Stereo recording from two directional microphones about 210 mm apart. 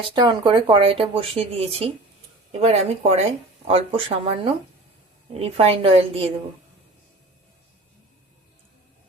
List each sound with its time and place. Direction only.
0.0 s speech: 20° right (ahead or behind)
5.3 s speech: 30° right (ahead or behind)